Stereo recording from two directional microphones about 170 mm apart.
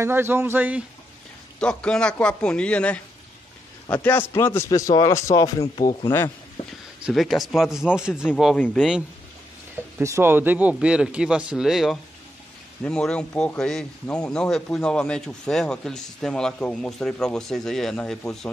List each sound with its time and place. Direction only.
0.0 s speech: 15° right (ahead or behind)
1.6 s a man's voice: 5° left (ahead or behind); by 5.9 s 20° left (ahead or behind)
7.1 s speech: centre (ahead or behind)
8.5 s speech: 10° left (ahead or behind)
9.9 s speech: 15° right (ahead or behind); by 18.1 s 5° left (ahead or behind)